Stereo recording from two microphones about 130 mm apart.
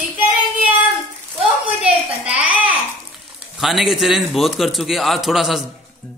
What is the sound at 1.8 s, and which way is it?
A child's voice, 10° right (ahead or behind).